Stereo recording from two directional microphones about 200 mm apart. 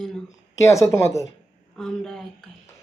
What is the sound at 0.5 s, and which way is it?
Speech, 15° left (ahead or behind).